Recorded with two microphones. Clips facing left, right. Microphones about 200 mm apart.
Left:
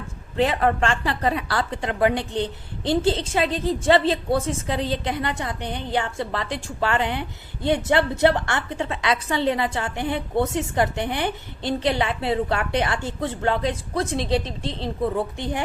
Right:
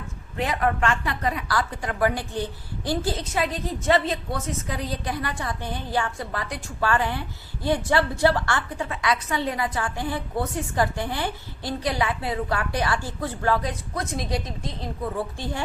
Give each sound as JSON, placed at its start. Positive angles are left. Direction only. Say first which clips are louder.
{"t": 0.3, "sound": "a woman's voice", "louder": "left 4 dB", "side_deg": 30}